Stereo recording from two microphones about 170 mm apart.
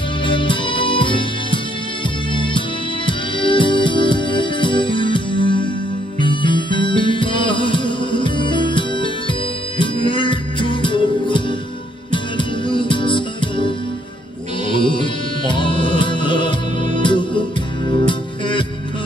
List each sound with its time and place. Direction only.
0.2 s music: 30° left (ahead or behind)